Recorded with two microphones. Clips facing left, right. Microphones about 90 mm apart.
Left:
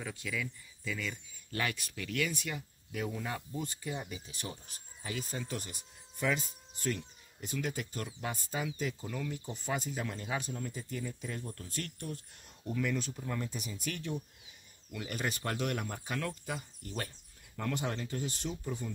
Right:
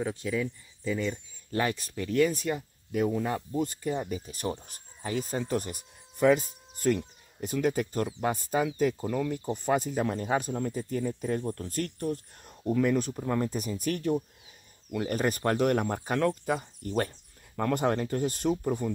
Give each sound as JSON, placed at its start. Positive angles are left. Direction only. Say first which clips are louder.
{"t": 0.0, "sound": "speech", "louder": "right 9 dB", "side_deg": -35}